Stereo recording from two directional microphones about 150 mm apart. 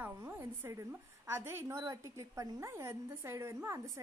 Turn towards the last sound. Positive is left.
turn(degrees=-20)  # may be behind; listen again after turning